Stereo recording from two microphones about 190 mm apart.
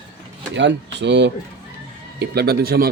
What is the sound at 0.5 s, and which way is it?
Speech, 65° right (ahead or behind).